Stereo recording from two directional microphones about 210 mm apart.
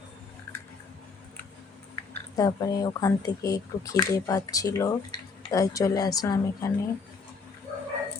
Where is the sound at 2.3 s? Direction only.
20° left (ahead or behind).